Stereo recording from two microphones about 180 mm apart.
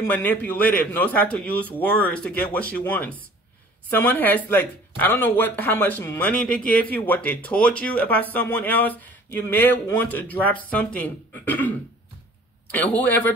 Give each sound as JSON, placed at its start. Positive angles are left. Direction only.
{"t": 0.0, "sound": "speech", "side_deg": 10}
{"t": 12.7, "sound": "speech", "side_deg": 10}